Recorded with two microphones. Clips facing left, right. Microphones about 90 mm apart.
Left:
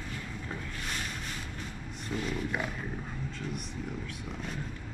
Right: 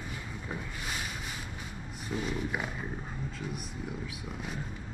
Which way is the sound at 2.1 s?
5° right (ahead or behind).